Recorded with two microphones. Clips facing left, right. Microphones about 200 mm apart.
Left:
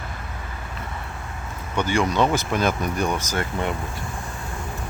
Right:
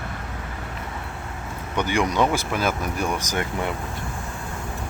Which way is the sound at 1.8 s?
15° right (ahead or behind).